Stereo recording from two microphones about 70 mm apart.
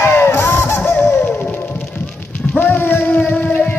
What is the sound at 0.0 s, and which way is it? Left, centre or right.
Honk, left.